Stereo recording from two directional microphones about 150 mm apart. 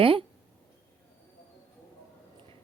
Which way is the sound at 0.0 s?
35° right (ahead or behind).